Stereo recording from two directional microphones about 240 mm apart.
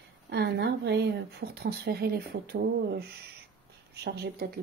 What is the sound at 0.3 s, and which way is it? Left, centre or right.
Speech, right.